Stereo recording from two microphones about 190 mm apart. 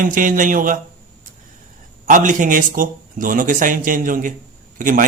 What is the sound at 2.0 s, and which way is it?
Speech, 45° right (ahead or behind).